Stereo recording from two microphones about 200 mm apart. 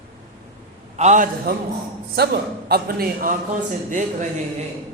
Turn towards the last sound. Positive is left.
turn(degrees=-40)  # may be behind; listen again after turning